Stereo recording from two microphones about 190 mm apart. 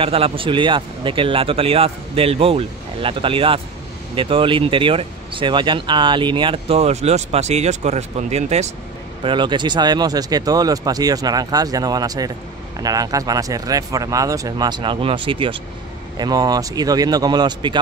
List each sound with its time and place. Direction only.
0.0 s speech: 30° right (ahead or behind)
9.2 s speech: 25° right (ahead or behind)